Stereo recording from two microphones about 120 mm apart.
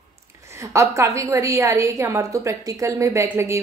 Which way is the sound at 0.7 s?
25° right (ahead or behind).